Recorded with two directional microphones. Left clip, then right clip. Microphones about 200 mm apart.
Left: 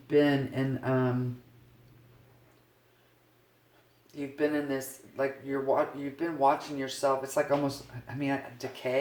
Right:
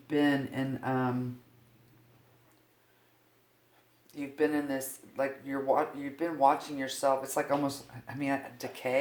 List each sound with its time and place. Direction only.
0.1 s speech: 35° right (ahead or behind)
4.1 s speech: 35° right (ahead or behind)